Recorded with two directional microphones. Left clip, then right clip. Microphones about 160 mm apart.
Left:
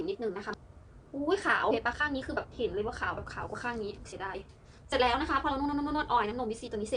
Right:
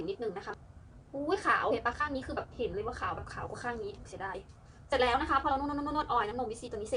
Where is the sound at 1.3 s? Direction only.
20° left (ahead or behind).